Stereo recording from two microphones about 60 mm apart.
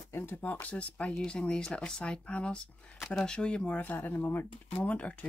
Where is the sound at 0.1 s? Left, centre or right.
Left.